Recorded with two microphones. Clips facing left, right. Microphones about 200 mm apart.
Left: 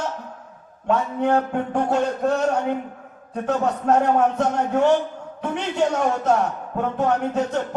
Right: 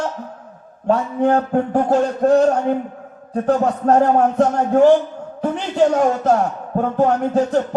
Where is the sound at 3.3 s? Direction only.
35° right (ahead or behind).